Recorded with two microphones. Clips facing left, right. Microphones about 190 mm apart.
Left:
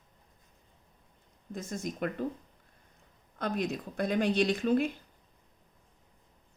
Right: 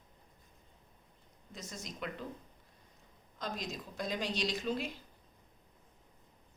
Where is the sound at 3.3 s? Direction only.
60° left (ahead or behind).